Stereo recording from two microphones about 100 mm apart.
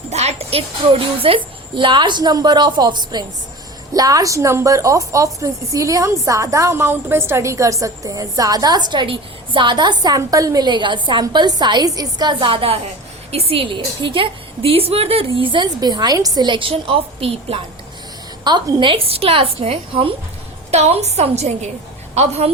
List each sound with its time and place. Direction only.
0.1 s speech: 90° right; by 1.4 s 70° right (ahead or behind)
1.7 s a woman's voice: 55° right (ahead or behind)
18.4 s a woman's voice: 50° right (ahead or behind); by 20.1 s 65° right (ahead or behind)
20.7 s a woman's voice: 90° right